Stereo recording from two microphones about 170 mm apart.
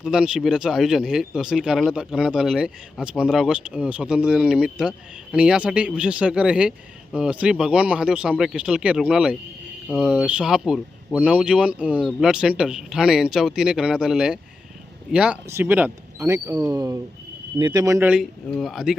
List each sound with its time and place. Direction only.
0.0 s speech: 5° right (ahead or behind)
18.1 s speech: centre (ahead or behind)